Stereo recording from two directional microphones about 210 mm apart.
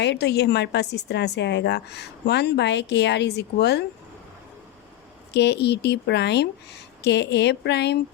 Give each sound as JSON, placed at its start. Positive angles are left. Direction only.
{"t": 0.0, "sound": "a woman's voice", "side_deg": 55}
{"t": 5.3, "sound": "a woman's voice", "side_deg": 55}